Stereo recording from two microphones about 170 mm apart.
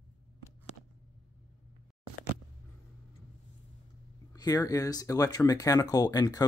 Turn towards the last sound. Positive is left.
turn(degrees=20)  # may be behind; listen again after turning